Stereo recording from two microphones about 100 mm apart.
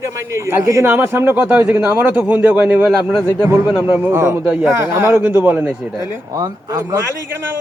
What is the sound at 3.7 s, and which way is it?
A man's voice, 15° right (ahead or behind).